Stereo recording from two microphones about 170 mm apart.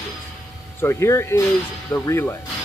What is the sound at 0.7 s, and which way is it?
Speech, 15° left (ahead or behind).